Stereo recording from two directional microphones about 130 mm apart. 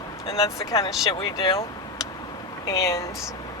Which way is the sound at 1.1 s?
40° left (ahead or behind).